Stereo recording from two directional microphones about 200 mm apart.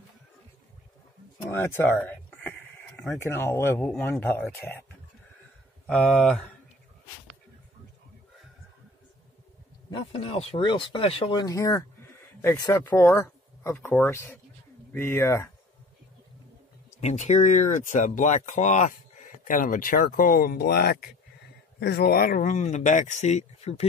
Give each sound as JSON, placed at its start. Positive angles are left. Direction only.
{"t": 1.4, "sound": "speech", "side_deg": 10}
{"t": 5.9, "sound": "speech", "side_deg": 5}
{"t": 9.8, "sound": "speech", "side_deg": 25}
{"t": 17.0, "sound": "speech", "side_deg": 35}